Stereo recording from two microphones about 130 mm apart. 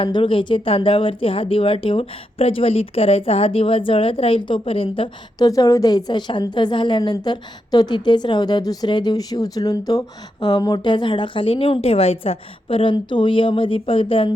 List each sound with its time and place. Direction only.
0.0 s speech: 40° left (ahead or behind)
5.4 s a woman's voice: 25° left (ahead or behind)